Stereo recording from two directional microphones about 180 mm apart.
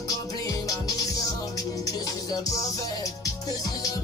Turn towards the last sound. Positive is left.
turn(degrees=20)  # may be behind; listen again after turning